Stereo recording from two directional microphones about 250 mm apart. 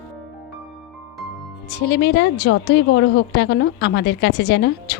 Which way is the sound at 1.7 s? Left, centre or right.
Left.